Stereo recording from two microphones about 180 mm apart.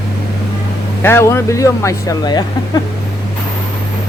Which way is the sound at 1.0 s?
15° left (ahead or behind).